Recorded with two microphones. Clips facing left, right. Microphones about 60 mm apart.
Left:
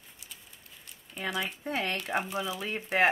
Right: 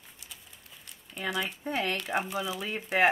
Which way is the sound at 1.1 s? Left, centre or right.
Centre.